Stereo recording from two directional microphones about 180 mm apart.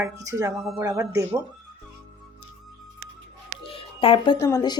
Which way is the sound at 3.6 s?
30° left (ahead or behind).